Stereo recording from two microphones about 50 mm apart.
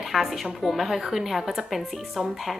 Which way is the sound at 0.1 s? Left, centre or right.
Centre.